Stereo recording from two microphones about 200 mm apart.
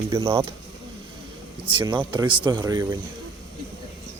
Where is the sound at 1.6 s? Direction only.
25° right (ahead or behind).